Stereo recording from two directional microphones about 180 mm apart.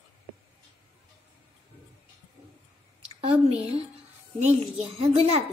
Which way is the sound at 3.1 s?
30° right (ahead or behind).